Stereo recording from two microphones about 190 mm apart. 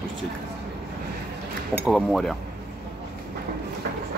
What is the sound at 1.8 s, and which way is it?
Speech, centre (ahead or behind).